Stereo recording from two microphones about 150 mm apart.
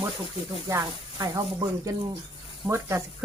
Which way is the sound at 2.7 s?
15° right (ahead or behind).